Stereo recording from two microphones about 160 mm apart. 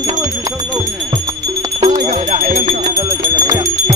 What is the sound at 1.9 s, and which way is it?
Music, 50° right (ahead or behind).